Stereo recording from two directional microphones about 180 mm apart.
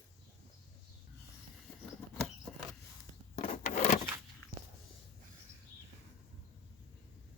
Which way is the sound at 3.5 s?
40° left (ahead or behind).